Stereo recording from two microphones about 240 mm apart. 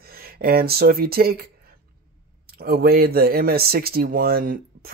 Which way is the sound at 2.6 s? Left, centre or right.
Right.